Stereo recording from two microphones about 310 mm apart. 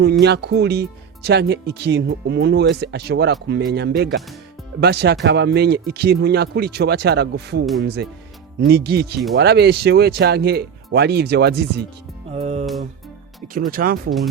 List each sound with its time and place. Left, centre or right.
0.0 s speech: right
12.3 s speech: right